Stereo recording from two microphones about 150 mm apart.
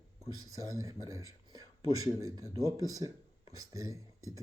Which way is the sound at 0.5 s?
20° right (ahead or behind).